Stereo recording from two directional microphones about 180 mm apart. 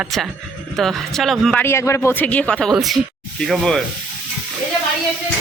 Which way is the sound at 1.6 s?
15° left (ahead or behind).